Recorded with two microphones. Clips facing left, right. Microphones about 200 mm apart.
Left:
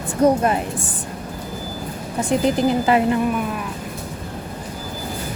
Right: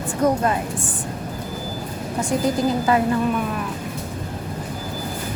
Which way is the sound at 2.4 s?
20° left (ahead or behind).